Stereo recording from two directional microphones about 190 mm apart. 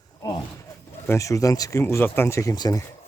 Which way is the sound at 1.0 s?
15° left (ahead or behind).